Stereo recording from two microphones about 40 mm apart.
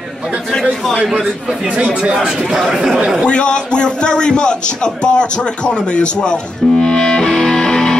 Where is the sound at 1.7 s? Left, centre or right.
Right.